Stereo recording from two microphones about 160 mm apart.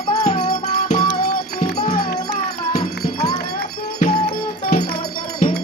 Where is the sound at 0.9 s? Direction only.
70° left (ahead or behind).